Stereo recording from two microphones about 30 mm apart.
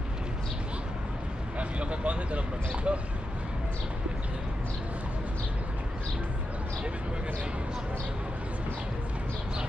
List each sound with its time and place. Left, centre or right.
1.6 s vehicle: right